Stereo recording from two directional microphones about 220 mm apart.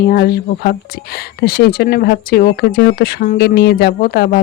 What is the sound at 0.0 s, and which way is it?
Speech, 45° left (ahead or behind).